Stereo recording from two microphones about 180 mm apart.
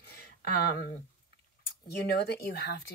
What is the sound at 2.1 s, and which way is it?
Speech, 65° left (ahead or behind).